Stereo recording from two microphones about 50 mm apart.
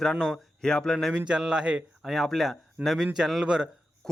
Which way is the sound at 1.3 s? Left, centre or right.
Centre.